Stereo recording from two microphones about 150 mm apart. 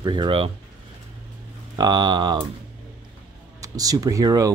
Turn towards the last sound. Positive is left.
turn(degrees=-25)  # may be behind; listen again after turning